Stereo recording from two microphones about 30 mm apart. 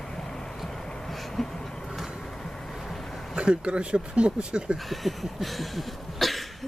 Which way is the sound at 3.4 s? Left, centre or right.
Right.